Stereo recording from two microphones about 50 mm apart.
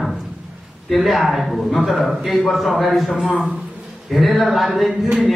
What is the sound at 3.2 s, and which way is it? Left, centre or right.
Speech, right.